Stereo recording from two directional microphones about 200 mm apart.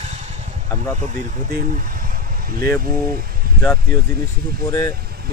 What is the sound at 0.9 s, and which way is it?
Speech, 40° right (ahead or behind).